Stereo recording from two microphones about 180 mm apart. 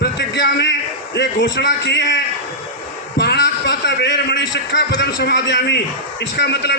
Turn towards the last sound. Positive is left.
turn(degrees=75)  # may be behind; listen again after turning